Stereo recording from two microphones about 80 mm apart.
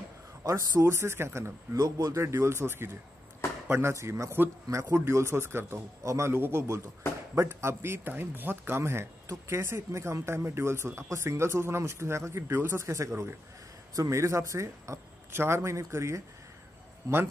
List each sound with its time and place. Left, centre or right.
0.4 s a man's voice: right
1.8 s a man's voice: right